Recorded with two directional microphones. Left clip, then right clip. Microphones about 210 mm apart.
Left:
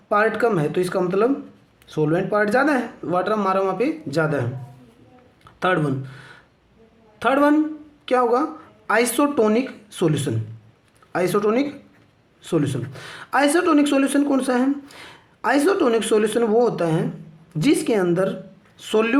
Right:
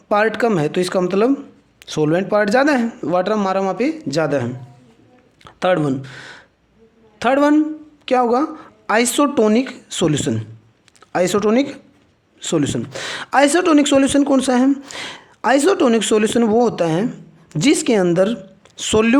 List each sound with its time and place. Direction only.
0.1 s speech: 45° right (ahead or behind)
5.5 s speech: 40° right (ahead or behind)